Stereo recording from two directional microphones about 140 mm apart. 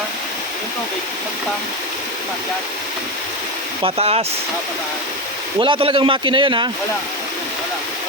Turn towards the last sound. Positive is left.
turn(degrees=-35)  # may be behind; listen again after turning